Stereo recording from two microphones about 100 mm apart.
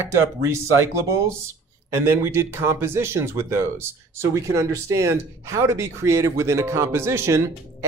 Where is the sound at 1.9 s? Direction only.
25° right (ahead or behind).